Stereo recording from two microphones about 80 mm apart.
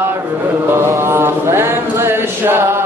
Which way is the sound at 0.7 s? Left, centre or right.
Right.